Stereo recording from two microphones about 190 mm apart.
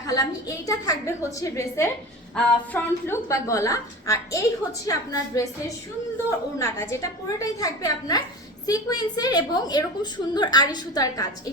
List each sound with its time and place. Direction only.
0.1 s a woman's voice: 20° left (ahead or behind)